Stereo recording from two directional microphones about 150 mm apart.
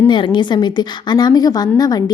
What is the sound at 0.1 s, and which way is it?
A woman's voice, 30° left (ahead or behind).